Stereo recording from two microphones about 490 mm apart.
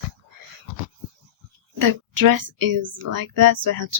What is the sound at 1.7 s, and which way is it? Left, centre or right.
A woman's voice, right.